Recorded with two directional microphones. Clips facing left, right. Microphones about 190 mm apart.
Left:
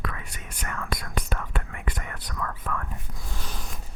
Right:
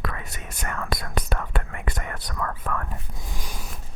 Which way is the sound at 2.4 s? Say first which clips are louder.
Right 2 dB; 50° right (ahead or behind).